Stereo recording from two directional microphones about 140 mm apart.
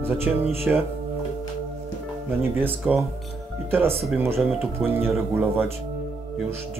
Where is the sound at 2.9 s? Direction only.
5° right (ahead or behind).